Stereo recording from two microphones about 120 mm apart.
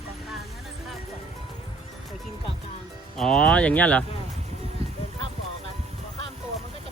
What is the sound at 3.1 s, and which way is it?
Speech, 5° left (ahead or behind).